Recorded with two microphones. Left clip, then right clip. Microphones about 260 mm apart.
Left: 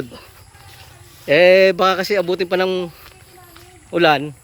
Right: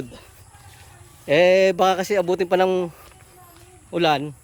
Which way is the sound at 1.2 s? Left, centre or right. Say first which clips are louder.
Left 5 dB; centre.